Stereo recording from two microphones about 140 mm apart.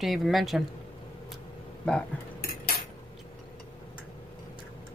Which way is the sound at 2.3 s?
90° left.